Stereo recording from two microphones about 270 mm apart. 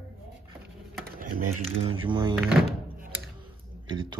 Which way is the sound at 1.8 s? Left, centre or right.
Centre.